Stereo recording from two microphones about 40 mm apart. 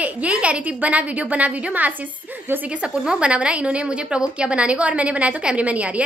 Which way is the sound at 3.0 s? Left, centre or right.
Right.